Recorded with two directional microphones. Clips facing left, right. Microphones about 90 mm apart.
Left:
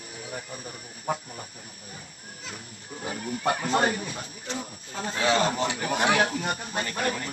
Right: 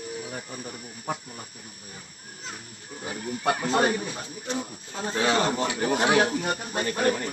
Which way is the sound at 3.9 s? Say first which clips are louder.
Right 3 dB; 30° right (ahead or behind).